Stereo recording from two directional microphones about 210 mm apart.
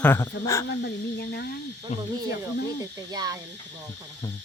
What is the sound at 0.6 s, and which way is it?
Speech, 50° left (ahead or behind).